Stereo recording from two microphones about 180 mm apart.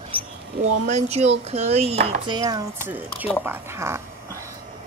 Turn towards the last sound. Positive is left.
turn(degrees=-15)  # may be behind; listen again after turning